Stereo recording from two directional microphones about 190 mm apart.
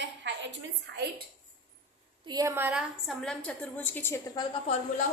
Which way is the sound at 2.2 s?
20° right (ahead or behind).